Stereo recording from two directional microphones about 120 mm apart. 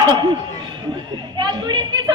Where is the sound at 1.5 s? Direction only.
40° right (ahead or behind).